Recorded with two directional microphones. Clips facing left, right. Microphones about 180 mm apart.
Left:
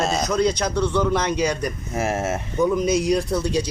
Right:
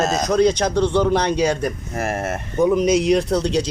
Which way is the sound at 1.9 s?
5° left (ahead or behind).